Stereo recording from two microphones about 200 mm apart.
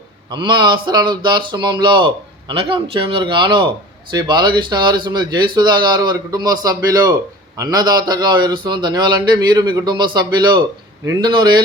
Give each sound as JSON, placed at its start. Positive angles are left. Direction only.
{"t": 0.3, "sound": "speech", "side_deg": -25}